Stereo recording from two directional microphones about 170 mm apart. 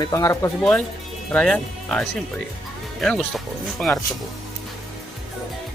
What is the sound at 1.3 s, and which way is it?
Speech, 5° left (ahead or behind).